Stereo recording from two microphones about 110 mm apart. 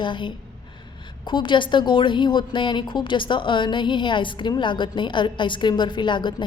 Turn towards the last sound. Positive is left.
turn(degrees=45)  # may be behind; listen again after turning